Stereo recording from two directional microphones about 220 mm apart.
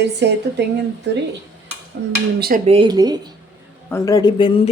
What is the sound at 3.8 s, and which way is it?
Speech, 15° left (ahead or behind).